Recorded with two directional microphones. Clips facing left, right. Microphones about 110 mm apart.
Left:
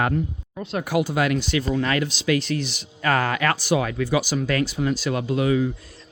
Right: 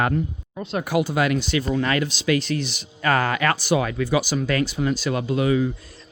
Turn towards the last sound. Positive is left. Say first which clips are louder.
# even
turn(degrees=-25)  # may be behind; listen again after turning